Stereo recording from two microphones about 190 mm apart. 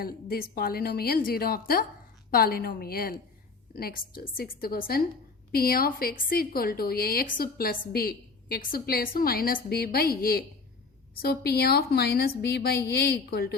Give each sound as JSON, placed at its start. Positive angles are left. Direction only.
{"t": 0.0, "sound": "a woman's voice", "side_deg": 50}